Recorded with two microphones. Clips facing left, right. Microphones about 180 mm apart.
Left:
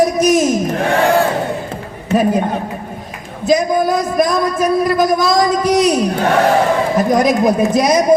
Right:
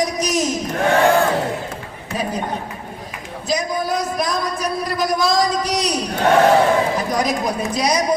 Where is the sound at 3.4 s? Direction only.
50° left (ahead or behind).